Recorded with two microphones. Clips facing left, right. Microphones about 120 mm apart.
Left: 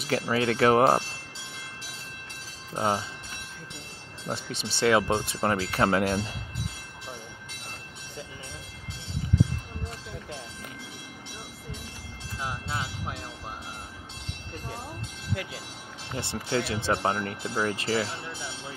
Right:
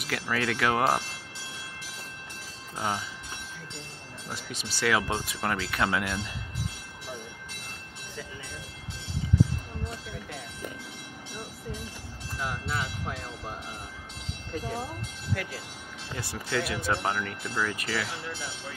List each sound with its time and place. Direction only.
0.0 s speech: 30° left (ahead or behind)
2.7 s speech: 30° left (ahead or behind)
4.3 s speech: 30° left (ahead or behind)
12.4 s speech: 20° left (ahead or behind)
16.2 s speech: 25° left (ahead or behind)